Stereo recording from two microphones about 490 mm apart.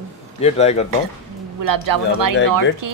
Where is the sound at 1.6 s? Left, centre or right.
Right.